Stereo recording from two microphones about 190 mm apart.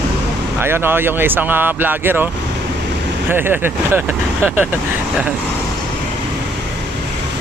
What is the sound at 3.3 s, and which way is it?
Speech, 10° right (ahead or behind).